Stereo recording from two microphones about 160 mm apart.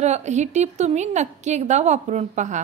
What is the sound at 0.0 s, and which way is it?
A woman's voice, 45° right (ahead or behind).